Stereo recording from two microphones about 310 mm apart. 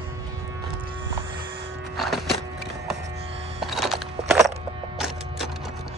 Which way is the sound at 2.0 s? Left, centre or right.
Centre.